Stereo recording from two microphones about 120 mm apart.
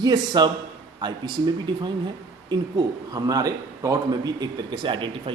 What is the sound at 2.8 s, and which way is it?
Speech, 35° right (ahead or behind).